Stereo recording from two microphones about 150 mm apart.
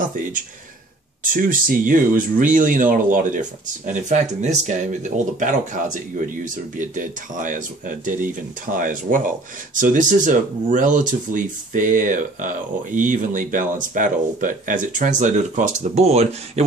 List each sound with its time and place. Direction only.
0.0 s speech: 60° right (ahead or behind); by 16.6 s 45° right (ahead or behind)